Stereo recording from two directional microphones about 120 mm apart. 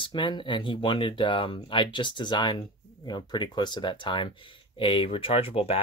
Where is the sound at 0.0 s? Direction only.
40° left (ahead or behind).